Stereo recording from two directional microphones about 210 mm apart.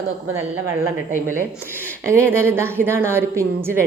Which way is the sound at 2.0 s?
10° right (ahead or behind).